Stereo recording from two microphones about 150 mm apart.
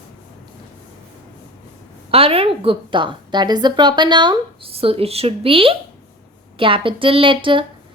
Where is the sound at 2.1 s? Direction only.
40° right (ahead or behind).